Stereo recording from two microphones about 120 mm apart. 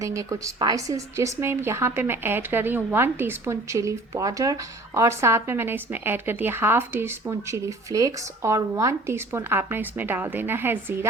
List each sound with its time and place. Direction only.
0.0 s speech: 25° right (ahead or behind)